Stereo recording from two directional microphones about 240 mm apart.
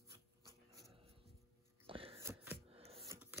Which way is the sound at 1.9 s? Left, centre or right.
Right.